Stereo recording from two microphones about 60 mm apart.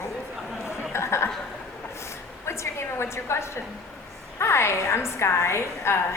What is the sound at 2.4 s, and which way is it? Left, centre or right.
A woman's voice, left.